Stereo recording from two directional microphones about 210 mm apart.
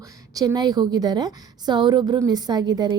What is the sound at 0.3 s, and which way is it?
A woman's voice, 20° right (ahead or behind).